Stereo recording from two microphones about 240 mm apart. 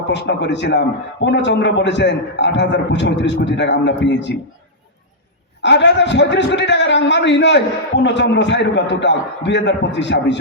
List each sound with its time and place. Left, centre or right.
0.1 s a man's voice: left
5.6 s a man's voice: left